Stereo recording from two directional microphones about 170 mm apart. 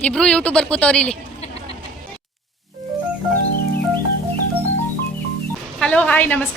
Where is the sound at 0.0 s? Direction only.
5° left (ahead or behind).